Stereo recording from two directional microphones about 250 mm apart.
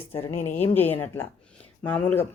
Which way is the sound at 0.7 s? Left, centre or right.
Centre.